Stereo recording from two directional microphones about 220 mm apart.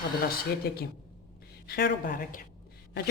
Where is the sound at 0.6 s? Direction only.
45° left (ahead or behind).